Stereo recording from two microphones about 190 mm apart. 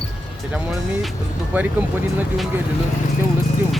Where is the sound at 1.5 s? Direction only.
10° right (ahead or behind).